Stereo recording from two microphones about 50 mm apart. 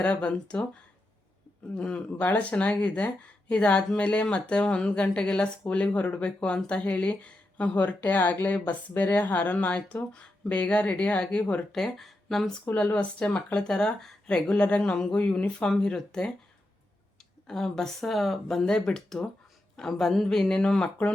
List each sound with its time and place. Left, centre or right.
0.0 s speech: left
11.7 s speech: centre
12.7 s speech: left
17.4 s speech: centre